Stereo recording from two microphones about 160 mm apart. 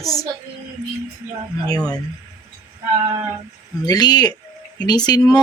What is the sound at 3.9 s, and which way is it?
Speech, 25° left (ahead or behind).